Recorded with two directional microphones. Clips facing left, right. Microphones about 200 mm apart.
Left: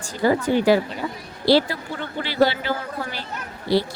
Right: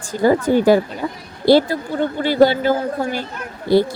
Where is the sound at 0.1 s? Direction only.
45° right (ahead or behind).